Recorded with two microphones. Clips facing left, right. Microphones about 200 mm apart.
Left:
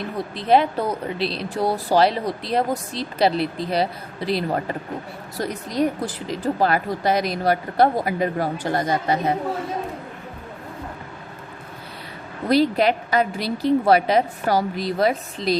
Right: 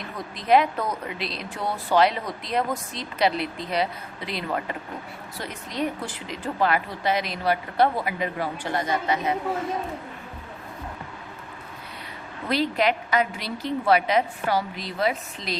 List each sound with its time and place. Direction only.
0.2 s speech: 30° left (ahead or behind)
12.5 s speech: 35° left (ahead or behind)